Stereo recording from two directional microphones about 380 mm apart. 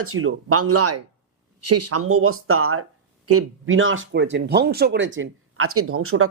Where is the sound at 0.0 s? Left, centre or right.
Right.